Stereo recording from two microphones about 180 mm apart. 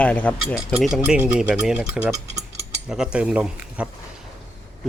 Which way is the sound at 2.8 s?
5° right (ahead or behind).